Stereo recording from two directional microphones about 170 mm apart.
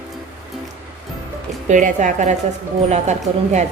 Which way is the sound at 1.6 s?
45° right (ahead or behind).